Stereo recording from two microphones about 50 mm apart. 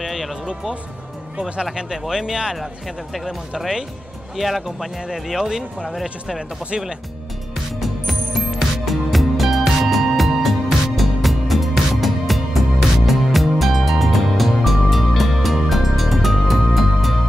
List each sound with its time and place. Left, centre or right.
0.0 s music: centre
1.4 s speech: centre
2.5 s speech: centre
7.8 s music: centre